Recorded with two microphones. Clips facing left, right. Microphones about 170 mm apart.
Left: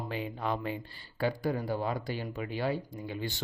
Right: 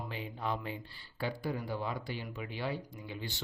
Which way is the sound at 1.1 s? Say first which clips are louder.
Left 6 dB; 45° left (ahead or behind).